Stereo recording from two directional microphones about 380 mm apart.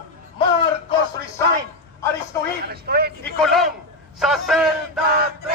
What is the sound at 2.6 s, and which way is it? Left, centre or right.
Speech, right.